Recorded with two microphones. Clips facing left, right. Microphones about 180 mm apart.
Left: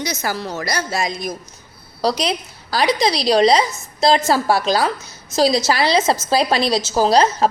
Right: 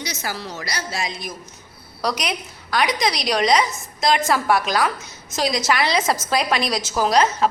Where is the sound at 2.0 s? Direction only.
30° left (ahead or behind).